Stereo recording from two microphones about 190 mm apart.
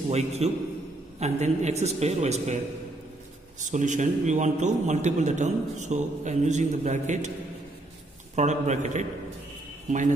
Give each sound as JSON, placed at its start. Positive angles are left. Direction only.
{"t": 0.1, "sound": "a man's voice", "side_deg": -35}
{"t": 3.6, "sound": "a man's voice", "side_deg": -40}
{"t": 8.4, "sound": "a man's voice", "side_deg": -40}